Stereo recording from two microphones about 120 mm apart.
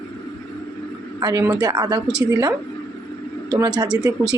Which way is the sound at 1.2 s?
30° right (ahead or behind).